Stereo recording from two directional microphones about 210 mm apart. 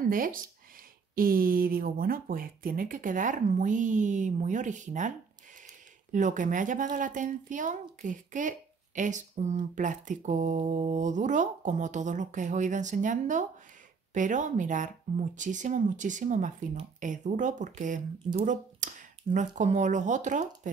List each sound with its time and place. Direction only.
0.0 s speech: 40° right (ahead or behind)
6.1 s speech: 35° right (ahead or behind)